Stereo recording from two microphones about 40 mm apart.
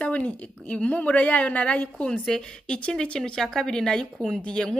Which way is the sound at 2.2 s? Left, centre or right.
Centre.